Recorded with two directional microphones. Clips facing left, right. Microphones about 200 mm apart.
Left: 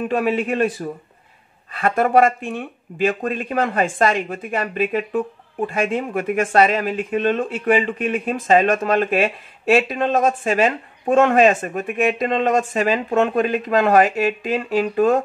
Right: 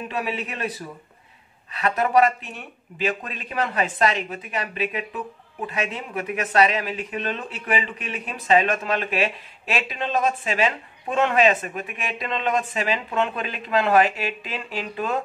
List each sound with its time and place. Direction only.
0.1 s speech: 50° left (ahead or behind)